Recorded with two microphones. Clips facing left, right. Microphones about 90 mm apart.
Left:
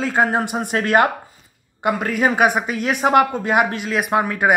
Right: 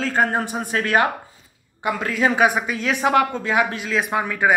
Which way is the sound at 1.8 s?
50° left (ahead or behind).